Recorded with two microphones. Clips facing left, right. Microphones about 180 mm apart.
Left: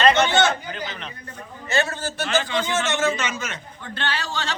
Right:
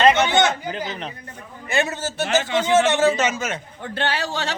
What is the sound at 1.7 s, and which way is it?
Speech, 15° right (ahead or behind).